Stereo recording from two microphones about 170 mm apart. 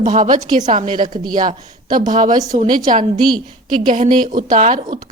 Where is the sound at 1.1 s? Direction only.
25° right (ahead or behind).